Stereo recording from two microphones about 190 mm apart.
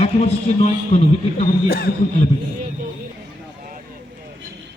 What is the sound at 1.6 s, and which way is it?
Speech, 55° left (ahead or behind).